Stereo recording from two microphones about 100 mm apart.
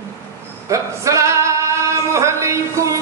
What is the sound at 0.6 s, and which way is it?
Male singing, 30° right (ahead or behind).